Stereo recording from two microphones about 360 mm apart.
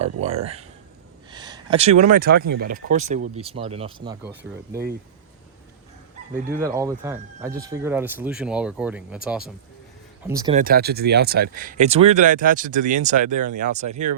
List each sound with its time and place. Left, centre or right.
0.0 s speech: centre
1.3 s a sound: centre
2.1 s speech: right; by 4.8 s centre
6.5 s speech: centre
10.6 s speech: right